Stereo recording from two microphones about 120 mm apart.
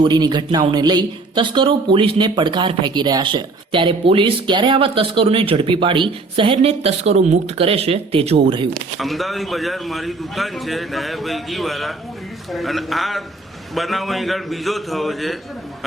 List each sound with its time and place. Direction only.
0.0 s speech: 35° right (ahead or behind)
8.7 s speech: centre (ahead or behind)